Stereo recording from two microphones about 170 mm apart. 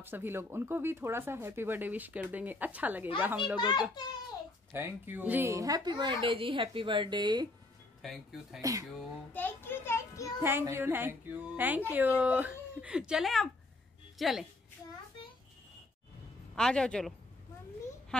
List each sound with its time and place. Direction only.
0.0 s speech: 10° right (ahead or behind)
3.5 s a child's voice: 25° left (ahead or behind)
4.7 s a woman's voice: 10° right (ahead or behind)
8.0 s speech: centre (ahead or behind)
8.5 s a woman's voice: 20° right (ahead or behind)
9.3 s children playing: 10° left (ahead or behind)
10.4 s a woman's voice: 15° right (ahead or behind)
16.5 s speech: 5° left (ahead or behind)